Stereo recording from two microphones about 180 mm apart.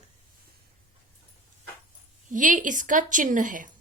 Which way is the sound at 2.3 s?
45° right (ahead or behind).